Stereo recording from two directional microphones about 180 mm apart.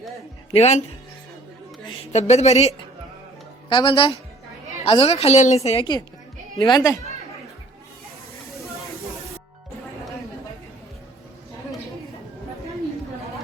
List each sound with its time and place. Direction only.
0.5 s a woman's voice: 35° left (ahead or behind)
1.9 s a woman's voice: 40° left (ahead or behind)
3.7 s a woman's voice: 25° left (ahead or behind)